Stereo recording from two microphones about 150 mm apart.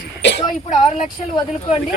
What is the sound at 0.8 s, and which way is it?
Speech, 45° left (ahead or behind).